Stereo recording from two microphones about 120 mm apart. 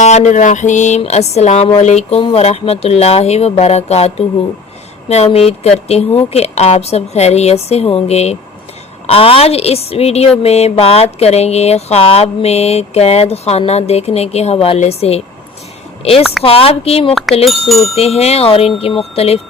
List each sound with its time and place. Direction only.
0.0 s a sound: 70° left (ahead or behind)
1.8 s a woman's voice: 70° left (ahead or behind)
9.0 s a woman's voice: 50° left (ahead or behind)
17.5 s speech: centre (ahead or behind)
17.9 s a woman's voice: 60° left (ahead or behind)